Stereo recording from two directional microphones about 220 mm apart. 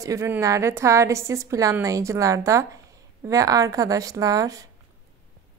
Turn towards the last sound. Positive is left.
turn(degrees=-15)  # may be behind; listen again after turning